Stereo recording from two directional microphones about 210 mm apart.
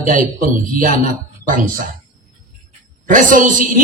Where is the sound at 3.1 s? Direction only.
40° right (ahead or behind).